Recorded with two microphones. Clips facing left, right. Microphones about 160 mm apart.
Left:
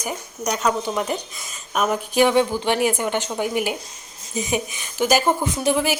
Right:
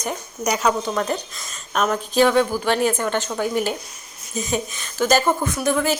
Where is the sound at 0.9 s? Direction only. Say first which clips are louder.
Right 1 dB; 10° left (ahead or behind).